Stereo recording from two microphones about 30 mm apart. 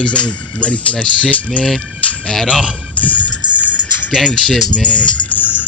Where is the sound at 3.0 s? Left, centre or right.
Left.